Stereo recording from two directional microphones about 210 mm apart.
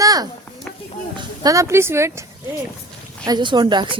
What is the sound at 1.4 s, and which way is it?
Speech, 15° right (ahead or behind).